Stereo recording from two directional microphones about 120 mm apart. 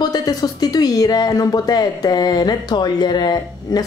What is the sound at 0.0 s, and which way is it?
Speech, 35° left (ahead or behind).